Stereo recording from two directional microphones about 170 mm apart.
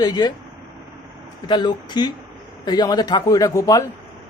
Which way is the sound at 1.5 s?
25° left (ahead or behind).